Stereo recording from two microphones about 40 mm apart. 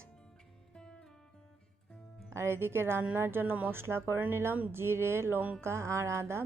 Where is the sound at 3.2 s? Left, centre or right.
Right.